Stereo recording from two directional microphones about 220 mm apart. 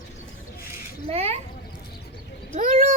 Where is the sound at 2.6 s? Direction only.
35° right (ahead or behind).